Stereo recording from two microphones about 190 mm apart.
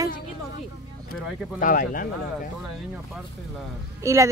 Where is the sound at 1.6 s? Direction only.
45° left (ahead or behind).